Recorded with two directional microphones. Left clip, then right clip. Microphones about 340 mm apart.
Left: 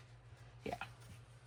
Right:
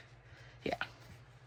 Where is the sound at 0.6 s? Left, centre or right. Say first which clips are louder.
Right 7 dB; centre.